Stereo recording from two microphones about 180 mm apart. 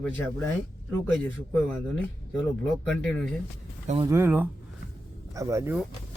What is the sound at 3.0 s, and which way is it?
Speech, 5° left (ahead or behind).